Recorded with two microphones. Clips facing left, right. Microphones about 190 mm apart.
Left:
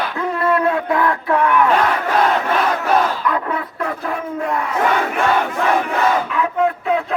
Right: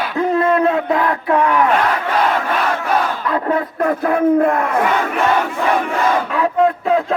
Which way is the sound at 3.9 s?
55° right (ahead or behind).